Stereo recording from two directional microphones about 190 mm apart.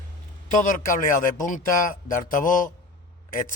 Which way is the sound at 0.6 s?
45° left (ahead or behind).